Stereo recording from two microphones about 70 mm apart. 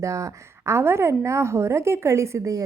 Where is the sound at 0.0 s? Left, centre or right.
Right.